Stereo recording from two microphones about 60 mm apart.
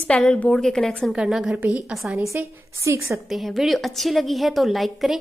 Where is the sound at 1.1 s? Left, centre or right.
Centre.